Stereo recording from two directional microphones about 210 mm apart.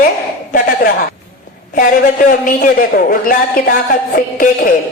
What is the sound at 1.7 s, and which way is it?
Speech, 40° left (ahead or behind).